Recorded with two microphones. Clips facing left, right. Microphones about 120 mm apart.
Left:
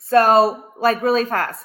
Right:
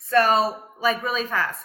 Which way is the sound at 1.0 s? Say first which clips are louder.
Left 8 dB; 45° left (ahead or behind).